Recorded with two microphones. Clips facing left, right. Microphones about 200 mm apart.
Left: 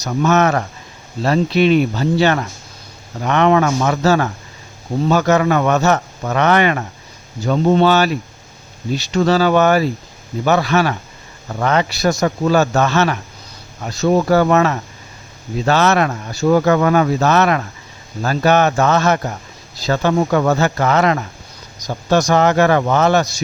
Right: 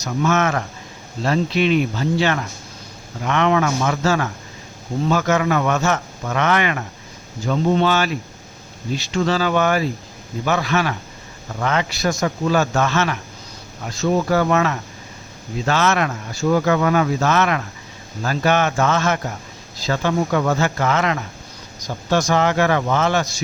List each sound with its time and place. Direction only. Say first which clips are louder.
0.0 s speech: left 4 dB; 40° left (ahead or behind)
9.1 s speech: left 5 dB; 40° left (ahead or behind)
14.1 s speech: left 5 dB; 50° left (ahead or behind)
14.3 s speech: left 4 dB; 40° left (ahead or behind)